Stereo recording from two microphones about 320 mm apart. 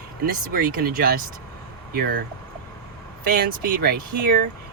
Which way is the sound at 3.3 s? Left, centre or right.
Right.